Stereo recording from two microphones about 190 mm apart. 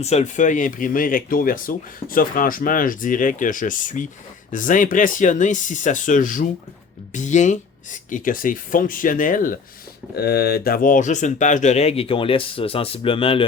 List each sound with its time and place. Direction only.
0.0 s speech: 35° left (ahead or behind)
10.2 s speech: 55° left (ahead or behind); by 13.4 s 30° left (ahead or behind)